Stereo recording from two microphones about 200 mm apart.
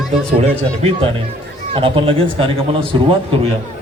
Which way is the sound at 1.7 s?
25° right (ahead or behind).